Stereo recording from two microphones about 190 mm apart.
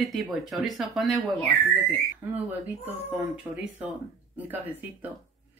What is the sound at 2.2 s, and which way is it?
Speech, 10° right (ahead or behind).